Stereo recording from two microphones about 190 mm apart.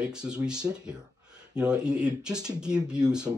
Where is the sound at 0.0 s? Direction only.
5° right (ahead or behind).